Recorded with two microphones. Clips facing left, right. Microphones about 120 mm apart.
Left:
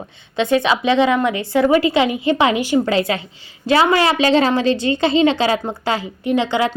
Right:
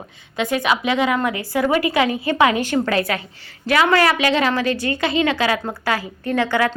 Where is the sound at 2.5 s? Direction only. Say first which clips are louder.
Left 3 dB; 15° left (ahead or behind).